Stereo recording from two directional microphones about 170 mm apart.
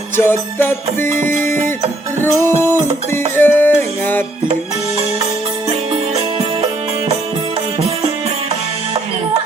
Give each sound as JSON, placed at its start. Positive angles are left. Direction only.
{"t": 0.2, "sound": "music", "side_deg": 15}
{"t": 2.2, "sound": "music", "side_deg": 15}
{"t": 5.9, "sound": "music", "side_deg": -35}